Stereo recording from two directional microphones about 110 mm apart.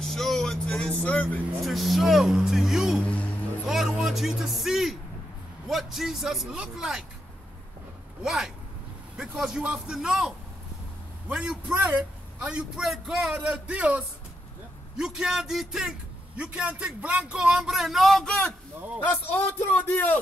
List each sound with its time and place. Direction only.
0.0 s speech: 5° left (ahead or behind)
1.6 s speech: centre (ahead or behind)
3.0 s music: 15° left (ahead or behind)
3.6 s speech: 5° right (ahead or behind)
8.2 s a man's voice: 5° right (ahead or behind); by 20.2 s 15° left (ahead or behind)